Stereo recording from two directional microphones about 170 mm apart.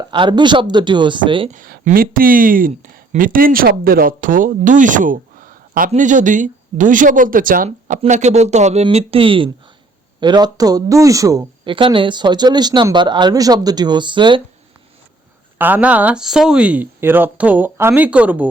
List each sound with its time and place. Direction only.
0.1 s speech: 25° right (ahead or behind)
1.5 s speech: 55° right (ahead or behind); by 14.4 s 30° right (ahead or behind)
15.5 s speech: 10° right (ahead or behind)